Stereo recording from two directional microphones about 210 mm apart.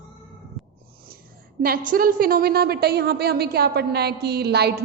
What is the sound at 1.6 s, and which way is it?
A woman's voice, 45° right (ahead or behind).